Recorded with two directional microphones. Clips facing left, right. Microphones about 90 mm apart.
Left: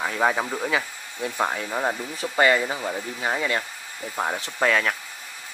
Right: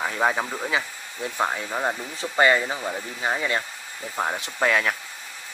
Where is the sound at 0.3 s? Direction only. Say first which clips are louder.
Left 1 dB; 5° left (ahead or behind).